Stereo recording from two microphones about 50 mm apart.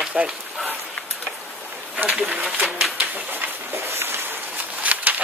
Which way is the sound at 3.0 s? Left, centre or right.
Right.